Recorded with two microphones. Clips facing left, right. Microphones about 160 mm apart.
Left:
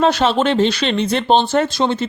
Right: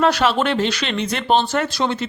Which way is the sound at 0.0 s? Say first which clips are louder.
Left 2 dB; 25° left (ahead or behind).